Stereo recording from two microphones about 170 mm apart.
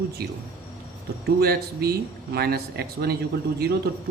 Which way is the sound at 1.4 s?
65° right (ahead or behind).